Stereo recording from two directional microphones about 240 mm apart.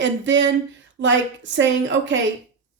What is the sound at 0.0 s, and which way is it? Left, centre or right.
A woman's voice, right.